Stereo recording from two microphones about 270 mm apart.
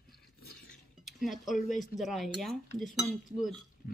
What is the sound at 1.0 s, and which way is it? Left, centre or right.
Speech, centre.